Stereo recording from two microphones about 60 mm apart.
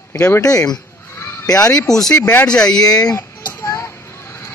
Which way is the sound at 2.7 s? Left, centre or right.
Left.